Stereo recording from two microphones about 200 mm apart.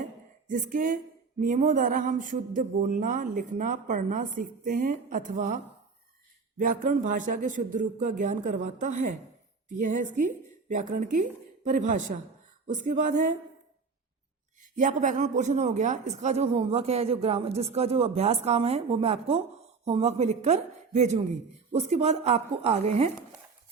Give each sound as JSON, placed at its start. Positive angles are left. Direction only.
{"t": 0.0, "sound": "a sound", "side_deg": -40}
{"t": 1.4, "sound": "a man's voice", "side_deg": -40}
{"t": 6.6, "sound": "a man's voice", "side_deg": -40}
{"t": 14.6, "sound": "a man's voice", "side_deg": -40}